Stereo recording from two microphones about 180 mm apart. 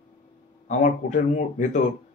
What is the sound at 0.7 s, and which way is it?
A man's voice, 45° left (ahead or behind).